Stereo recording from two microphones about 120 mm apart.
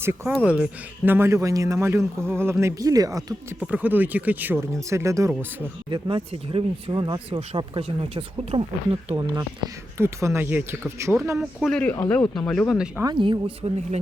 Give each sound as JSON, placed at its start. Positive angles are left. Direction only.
{"t": 0.0, "sound": "a man's voice", "side_deg": -20}
{"t": 0.3, "sound": "speech", "side_deg": -5}
{"t": 1.0, "sound": "a man's voice", "side_deg": -20}
{"t": 3.6, "sound": "speech", "side_deg": -15}
{"t": 5.9, "sound": "speech", "side_deg": -40}
{"t": 9.1, "sound": "speech", "side_deg": -35}
{"t": 10.0, "sound": "a man's voice", "side_deg": -25}
{"t": 11.3, "sound": "speech", "side_deg": 5}
{"t": 12.5, "sound": "speech", "side_deg": 5}
{"t": 13.1, "sound": "speech", "side_deg": -45}